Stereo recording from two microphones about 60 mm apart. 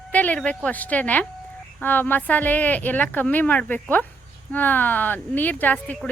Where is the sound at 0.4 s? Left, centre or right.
Left.